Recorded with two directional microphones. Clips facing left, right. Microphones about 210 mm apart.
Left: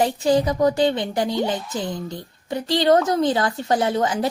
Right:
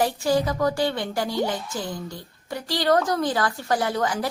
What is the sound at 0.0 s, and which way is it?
A woman's voice, 20° left (ahead or behind).